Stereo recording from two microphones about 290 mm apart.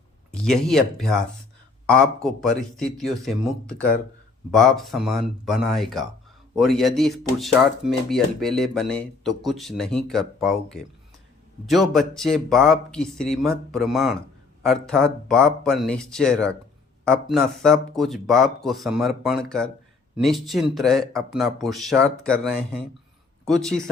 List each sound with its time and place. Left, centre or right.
0.3 s speech: centre
2.2 s speech: centre